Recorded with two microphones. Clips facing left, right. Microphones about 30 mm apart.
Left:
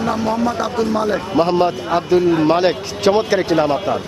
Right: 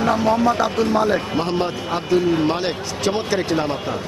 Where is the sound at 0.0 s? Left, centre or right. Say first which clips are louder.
Right 1 dB; centre.